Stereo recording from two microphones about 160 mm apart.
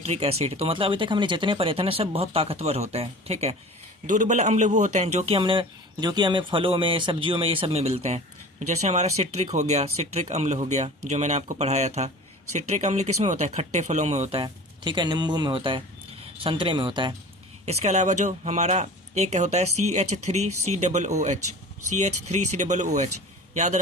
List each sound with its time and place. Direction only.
0.0 s speech: 40° right (ahead or behind)
17.7 s speech: 45° right (ahead or behind)